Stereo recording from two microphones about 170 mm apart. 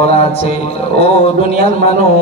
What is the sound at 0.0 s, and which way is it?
A man's voice, 35° left (ahead or behind).